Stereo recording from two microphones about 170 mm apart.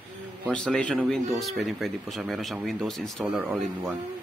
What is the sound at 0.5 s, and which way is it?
Speech, 5° left (ahead or behind).